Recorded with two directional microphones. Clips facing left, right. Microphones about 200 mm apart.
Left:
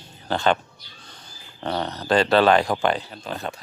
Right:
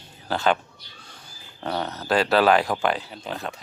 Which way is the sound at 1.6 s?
5° right (ahead or behind).